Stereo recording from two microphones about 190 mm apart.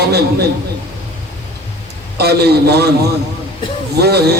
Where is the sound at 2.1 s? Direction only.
60° right (ahead or behind).